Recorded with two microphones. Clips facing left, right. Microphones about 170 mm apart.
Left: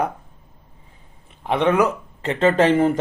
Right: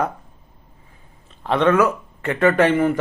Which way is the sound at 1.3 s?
15° left (ahead or behind).